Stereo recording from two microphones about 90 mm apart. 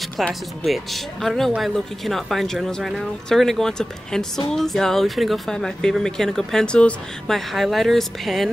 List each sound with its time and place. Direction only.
0.3 s speech: centre (ahead or behind)
7.3 s speech: centre (ahead or behind)